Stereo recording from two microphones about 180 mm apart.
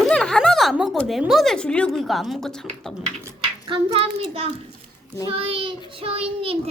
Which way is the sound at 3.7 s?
30° right (ahead or behind).